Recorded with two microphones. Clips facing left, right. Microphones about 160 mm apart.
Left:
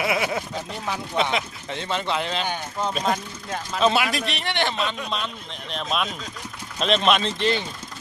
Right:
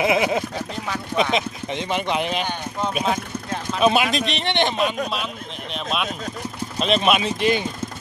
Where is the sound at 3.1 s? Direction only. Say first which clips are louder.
Right 3 dB; centre (ahead or behind).